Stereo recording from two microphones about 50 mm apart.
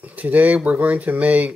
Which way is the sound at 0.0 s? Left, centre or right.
Right.